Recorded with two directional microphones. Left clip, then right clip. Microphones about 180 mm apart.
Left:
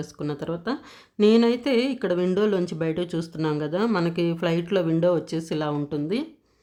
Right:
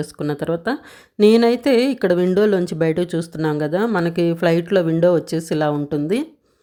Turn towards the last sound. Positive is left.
turn(degrees=-30)  # may be behind; listen again after turning